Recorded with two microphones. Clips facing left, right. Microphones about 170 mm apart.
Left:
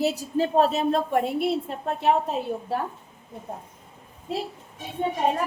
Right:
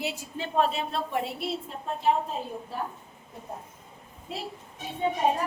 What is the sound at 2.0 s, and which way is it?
Speech, 70° left (ahead or behind).